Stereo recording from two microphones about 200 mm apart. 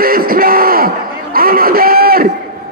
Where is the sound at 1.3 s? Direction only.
45° right (ahead or behind).